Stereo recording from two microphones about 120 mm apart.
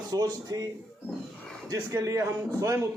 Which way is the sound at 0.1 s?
35° right (ahead or behind).